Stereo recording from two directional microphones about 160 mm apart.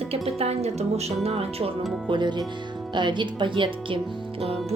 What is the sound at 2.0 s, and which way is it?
Speech, 30° right (ahead or behind).